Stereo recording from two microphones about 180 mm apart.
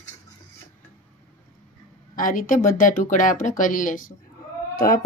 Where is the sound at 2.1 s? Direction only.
45° left (ahead or behind).